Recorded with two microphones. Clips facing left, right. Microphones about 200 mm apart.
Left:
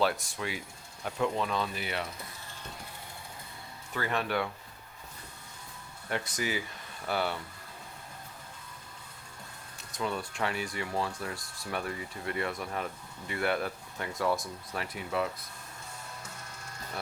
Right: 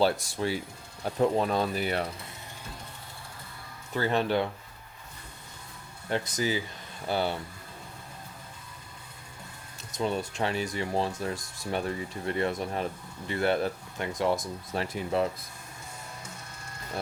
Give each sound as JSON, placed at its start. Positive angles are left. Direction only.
{"t": 0.0, "sound": "speech", "side_deg": -35}
{"t": 3.9, "sound": "speech", "side_deg": -30}
{"t": 6.1, "sound": "speech", "side_deg": -30}
{"t": 10.0, "sound": "speech", "side_deg": -25}